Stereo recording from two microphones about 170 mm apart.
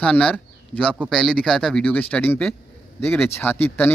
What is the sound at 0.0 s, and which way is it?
Speech, 5° left (ahead or behind).